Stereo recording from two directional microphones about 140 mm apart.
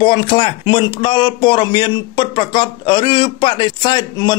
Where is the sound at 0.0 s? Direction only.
30° left (ahead or behind).